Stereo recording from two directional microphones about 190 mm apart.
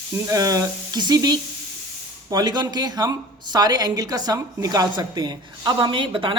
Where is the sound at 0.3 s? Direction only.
20° right (ahead or behind).